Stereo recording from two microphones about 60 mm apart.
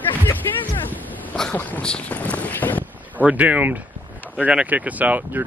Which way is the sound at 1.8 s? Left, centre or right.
Centre.